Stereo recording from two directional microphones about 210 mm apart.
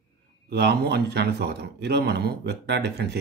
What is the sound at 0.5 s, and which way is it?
Speech, 50° right (ahead or behind).